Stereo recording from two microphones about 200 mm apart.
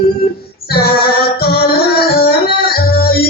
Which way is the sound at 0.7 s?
50° left (ahead or behind).